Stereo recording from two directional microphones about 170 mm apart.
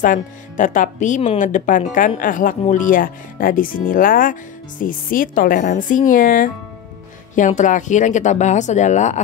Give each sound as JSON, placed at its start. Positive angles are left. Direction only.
{"t": 0.0, "sound": "speech", "side_deg": 50}